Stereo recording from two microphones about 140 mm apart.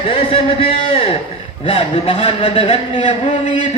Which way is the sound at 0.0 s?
40° left (ahead or behind).